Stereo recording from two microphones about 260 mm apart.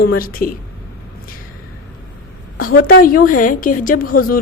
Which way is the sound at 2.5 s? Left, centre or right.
Left.